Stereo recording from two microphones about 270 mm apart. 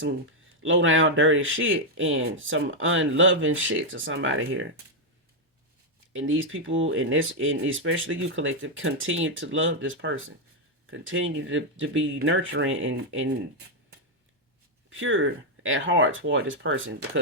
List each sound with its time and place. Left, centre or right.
0.6 s speech: right
6.1 s speech: right
14.8 s speech: right